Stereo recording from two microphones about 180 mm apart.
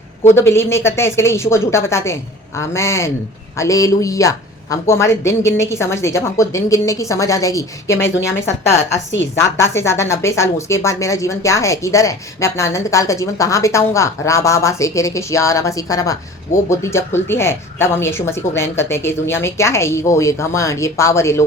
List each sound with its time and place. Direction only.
0.3 s speech: 15° left (ahead or behind)
9.6 s speech: 15° left (ahead or behind)